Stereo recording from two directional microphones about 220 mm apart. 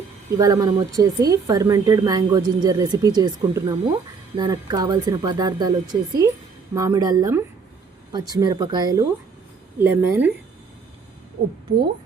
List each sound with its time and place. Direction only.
0.3 s speech: 15° right (ahead or behind)